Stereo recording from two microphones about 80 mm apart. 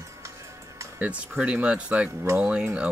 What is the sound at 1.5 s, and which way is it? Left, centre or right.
Speech, centre.